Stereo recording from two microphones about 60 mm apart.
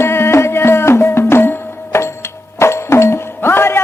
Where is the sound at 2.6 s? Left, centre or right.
Left.